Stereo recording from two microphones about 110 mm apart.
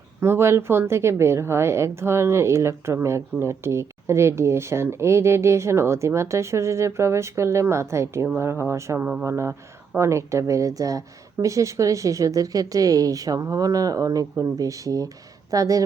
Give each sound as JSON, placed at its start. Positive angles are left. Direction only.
{"t": 0.2, "sound": "a woman's voice", "side_deg": -25}